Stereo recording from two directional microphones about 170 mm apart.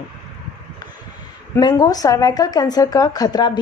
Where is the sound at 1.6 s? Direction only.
25° left (ahead or behind).